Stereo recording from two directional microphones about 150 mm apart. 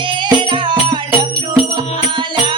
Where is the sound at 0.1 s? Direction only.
30° right (ahead or behind).